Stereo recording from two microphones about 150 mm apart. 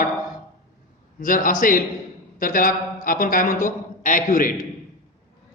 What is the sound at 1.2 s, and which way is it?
A man's voice, 65° left (ahead or behind).